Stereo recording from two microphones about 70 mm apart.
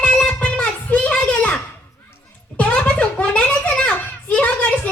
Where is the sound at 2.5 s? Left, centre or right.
Centre.